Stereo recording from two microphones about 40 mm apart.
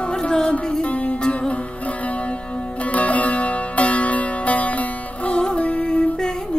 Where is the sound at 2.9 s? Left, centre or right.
Left.